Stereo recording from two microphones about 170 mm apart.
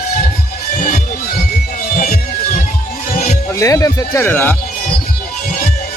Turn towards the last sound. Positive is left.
turn(degrees=10)  # may be behind; listen again after turning